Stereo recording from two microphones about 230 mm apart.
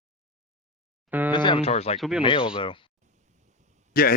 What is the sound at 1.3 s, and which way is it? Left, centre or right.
Speech, left.